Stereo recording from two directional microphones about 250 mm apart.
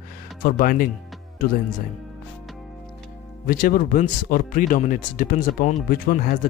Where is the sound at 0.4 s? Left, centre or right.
Left.